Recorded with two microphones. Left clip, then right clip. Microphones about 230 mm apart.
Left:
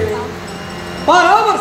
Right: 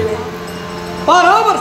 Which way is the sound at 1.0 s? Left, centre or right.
Right.